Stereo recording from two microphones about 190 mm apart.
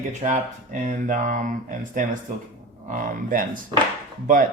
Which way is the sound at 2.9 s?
45° right (ahead or behind).